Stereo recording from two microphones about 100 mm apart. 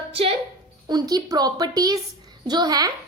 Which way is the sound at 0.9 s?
40° right (ahead or behind).